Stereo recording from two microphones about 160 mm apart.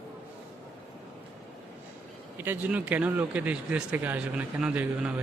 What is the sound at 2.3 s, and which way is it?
Speech, 10° right (ahead or behind).